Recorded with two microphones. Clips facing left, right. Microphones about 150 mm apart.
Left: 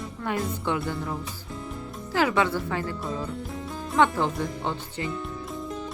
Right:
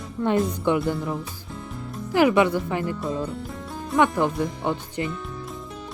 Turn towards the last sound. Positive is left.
turn(degrees=-15)  # may be behind; listen again after turning